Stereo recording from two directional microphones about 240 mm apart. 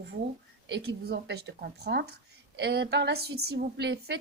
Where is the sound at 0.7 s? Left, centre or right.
Right.